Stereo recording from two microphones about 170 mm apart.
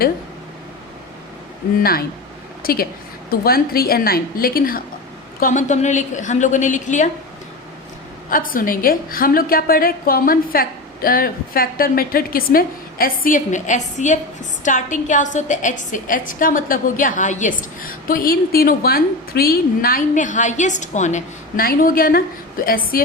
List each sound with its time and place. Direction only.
1.8 s a woman's voice: 60° left (ahead or behind)
5.4 s a woman's voice: 50° left (ahead or behind)
8.3 s a woman's voice: 55° left (ahead or behind)